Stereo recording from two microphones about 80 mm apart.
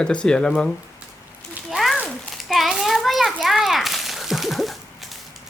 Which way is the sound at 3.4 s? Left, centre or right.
Centre.